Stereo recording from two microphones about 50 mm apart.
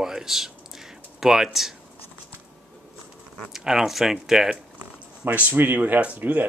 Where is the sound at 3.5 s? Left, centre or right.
Centre.